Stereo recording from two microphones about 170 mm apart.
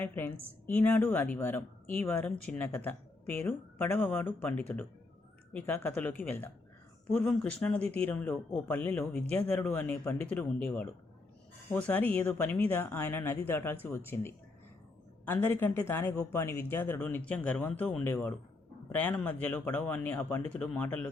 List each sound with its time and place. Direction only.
0.0 s speech: 10° left (ahead or behind)